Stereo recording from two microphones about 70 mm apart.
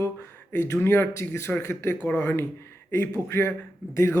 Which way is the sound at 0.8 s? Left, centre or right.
Left.